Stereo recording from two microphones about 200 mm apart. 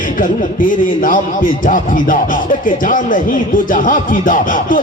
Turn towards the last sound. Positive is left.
turn(degrees=45)  # may be behind; listen again after turning